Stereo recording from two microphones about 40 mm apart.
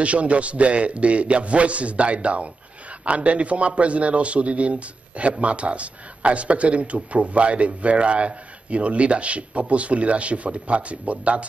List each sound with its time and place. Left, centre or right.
0.0 s a man's voice: right